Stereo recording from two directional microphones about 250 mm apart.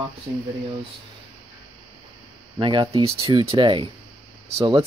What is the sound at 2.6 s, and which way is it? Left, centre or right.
Speech, centre.